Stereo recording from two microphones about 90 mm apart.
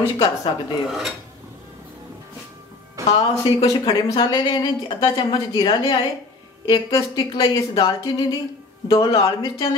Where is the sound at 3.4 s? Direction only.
65° left (ahead or behind).